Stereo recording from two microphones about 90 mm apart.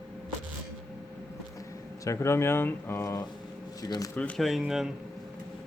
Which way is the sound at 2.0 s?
35° left (ahead or behind).